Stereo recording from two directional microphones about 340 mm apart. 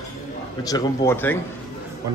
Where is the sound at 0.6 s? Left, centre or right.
Centre.